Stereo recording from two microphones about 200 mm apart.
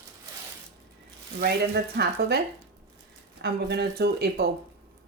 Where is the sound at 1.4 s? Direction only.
55° right (ahead or behind).